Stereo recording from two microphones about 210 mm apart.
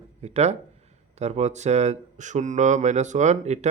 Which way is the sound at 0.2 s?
30° right (ahead or behind).